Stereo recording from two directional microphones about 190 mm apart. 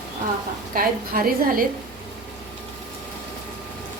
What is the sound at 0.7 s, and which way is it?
Speech, 50° right (ahead or behind).